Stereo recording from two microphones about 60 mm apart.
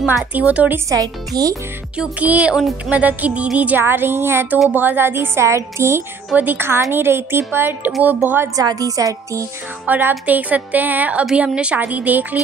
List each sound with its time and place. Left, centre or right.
0.0 s a woman's voice: right
0.8 s speech: right
2.0 s a woman's voice: right
3.8 s a woman's voice: right
6.3 s a woman's voice: right
6.7 s a woman's voice: right
8.5 s a woman's voice: right
9.8 s a woman's voice: right
11.8 s a woman's voice: right